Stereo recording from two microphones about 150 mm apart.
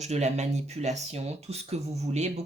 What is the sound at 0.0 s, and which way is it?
Speech, 45° right (ahead or behind).